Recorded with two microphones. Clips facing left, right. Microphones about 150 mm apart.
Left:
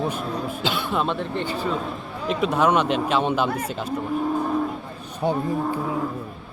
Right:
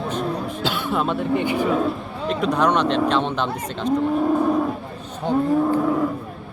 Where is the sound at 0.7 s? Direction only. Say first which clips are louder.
Right 2 dB; 5° right (ahead or behind).